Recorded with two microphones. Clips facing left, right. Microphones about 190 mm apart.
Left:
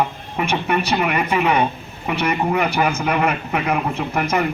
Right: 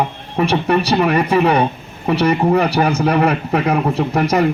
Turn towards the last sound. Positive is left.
turn(degrees=-35)  # may be behind; listen again after turning